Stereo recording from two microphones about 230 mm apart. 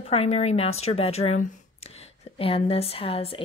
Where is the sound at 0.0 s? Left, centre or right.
Left.